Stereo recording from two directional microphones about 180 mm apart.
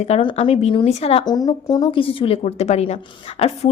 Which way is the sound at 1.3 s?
20° left (ahead or behind).